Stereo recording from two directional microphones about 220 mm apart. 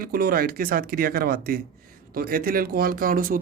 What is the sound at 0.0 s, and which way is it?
Speech, 40° right (ahead or behind).